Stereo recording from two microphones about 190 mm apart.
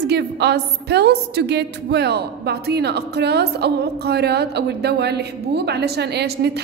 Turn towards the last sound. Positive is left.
turn(degrees=-60)  # may be behind; listen again after turning